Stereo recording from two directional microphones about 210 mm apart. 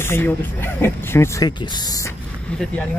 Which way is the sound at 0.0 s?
10° left (ahead or behind).